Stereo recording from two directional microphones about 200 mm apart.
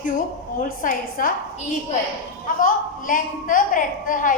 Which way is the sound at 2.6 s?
40° left (ahead or behind).